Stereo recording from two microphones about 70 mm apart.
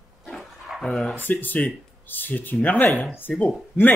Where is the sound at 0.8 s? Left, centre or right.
Centre.